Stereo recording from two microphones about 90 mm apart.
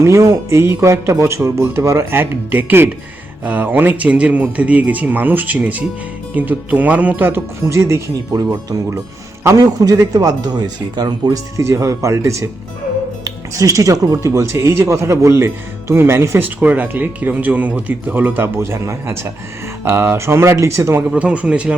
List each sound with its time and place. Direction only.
0.0 s speech: 30° right (ahead or behind)
8.4 s speech: 45° right (ahead or behind); by 16.5 s 30° right (ahead or behind)
16.6 s speech: 15° right (ahead or behind)
21.1 s speech: 15° right (ahead or behind)